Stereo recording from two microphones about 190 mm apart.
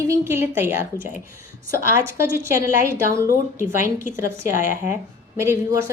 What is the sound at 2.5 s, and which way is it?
A woman's voice, 15° right (ahead or behind).